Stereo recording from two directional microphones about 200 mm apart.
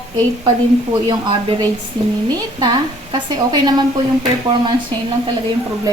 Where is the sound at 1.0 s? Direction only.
25° right (ahead or behind).